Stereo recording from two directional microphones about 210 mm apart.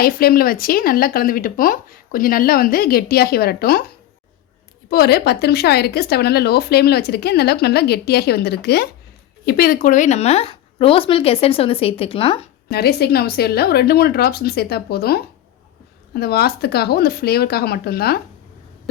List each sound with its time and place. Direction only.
0.0 s speech: 45° left (ahead or behind)
4.9 s speech: 50° left (ahead or behind); by 12.5 s 25° left (ahead or behind)
12.7 s speech: 50° left (ahead or behind)